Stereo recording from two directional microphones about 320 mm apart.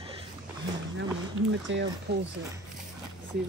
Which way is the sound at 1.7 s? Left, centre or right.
Right.